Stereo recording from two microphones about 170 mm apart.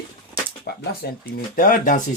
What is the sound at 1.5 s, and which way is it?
Speech, 55° left (ahead or behind).